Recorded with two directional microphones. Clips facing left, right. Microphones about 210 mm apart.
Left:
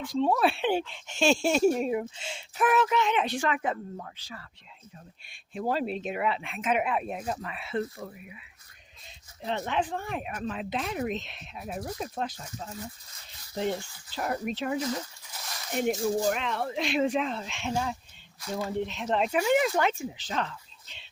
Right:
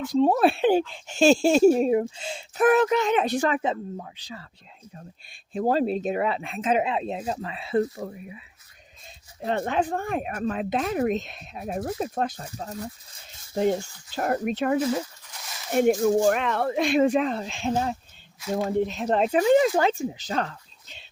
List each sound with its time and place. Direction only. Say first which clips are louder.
0.1 s speech: right 5 dB; 40° right (ahead or behind)
3.6 s speech: right 4 dB; 20° right (ahead or behind)
5.5 s speech: right 6 dB; 40° right (ahead or behind)
9.4 s speech: right 5 dB; 50° right (ahead or behind)
11.8 s speech: right 6 dB; 30° right (ahead or behind); by 14.8 s 55° right (ahead or behind)
15.3 s a sound: even; centre (ahead or behind)
16.3 s speech: right 6 dB; 55° right (ahead or behind)